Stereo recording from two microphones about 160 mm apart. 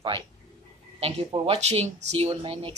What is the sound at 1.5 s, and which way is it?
Speech, 40° right (ahead or behind).